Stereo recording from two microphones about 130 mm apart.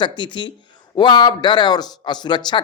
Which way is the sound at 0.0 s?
35° left (ahead or behind).